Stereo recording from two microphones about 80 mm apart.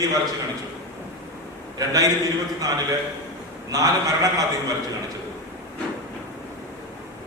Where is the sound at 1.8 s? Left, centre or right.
Right.